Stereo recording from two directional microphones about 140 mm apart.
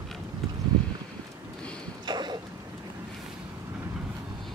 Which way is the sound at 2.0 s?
30° right (ahead or behind).